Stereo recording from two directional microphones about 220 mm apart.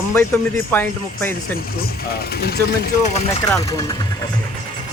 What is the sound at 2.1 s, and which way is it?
Speech, 45° left (ahead or behind).